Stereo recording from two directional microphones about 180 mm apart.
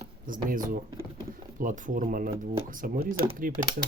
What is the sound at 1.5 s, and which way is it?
Speech, 45° right (ahead or behind).